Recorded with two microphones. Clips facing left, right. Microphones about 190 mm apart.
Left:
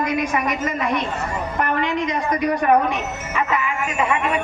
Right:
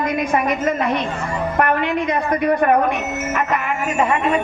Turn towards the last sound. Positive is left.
turn(degrees=-45)  # may be behind; listen again after turning